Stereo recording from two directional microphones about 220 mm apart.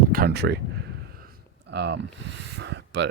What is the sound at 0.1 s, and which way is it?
Speech, 45° right (ahead or behind).